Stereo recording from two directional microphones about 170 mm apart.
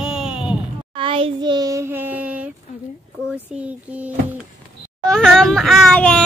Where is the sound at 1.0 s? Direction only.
30° right (ahead or behind); by 2.4 s 10° right (ahead or behind).